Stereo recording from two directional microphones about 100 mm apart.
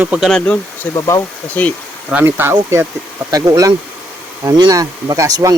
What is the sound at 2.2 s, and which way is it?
Speech, 20° right (ahead or behind).